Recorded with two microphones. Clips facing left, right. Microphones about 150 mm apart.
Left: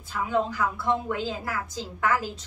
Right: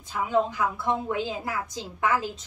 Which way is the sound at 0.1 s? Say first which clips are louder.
Right 1 dB; 20° right (ahead or behind).